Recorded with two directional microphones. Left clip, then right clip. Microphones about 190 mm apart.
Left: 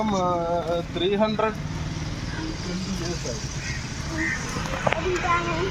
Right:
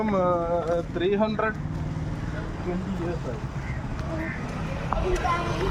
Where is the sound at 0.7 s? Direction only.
5° right (ahead or behind).